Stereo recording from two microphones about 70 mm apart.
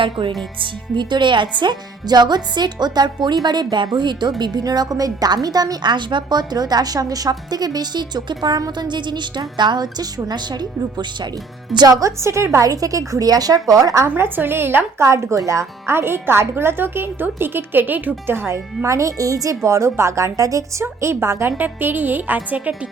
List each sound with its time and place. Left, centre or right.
1.6 s speech: right
11.9 s a woman's voice: right
14.2 s speech: right
20.8 s speech: right
21.6 s a woman's voice: right